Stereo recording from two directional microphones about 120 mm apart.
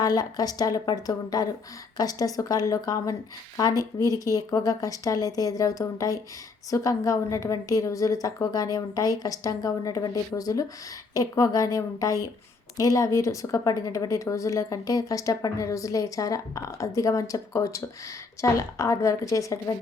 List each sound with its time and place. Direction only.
0.0 s a woman's voice: 30° left (ahead or behind)